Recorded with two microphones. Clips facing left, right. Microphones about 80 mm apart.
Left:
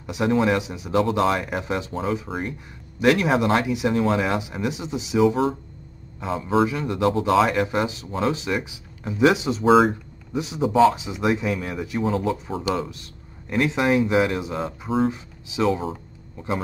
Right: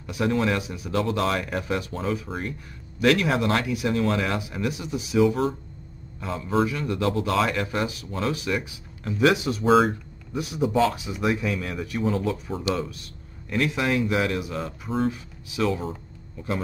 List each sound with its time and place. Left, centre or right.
0.0 s a man's voice: centre
9.7 s speech: centre
10.3 s speech: left
10.7 s speech: centre
11.0 s speech: left
12.4 s speech: centre
13.5 s speech: left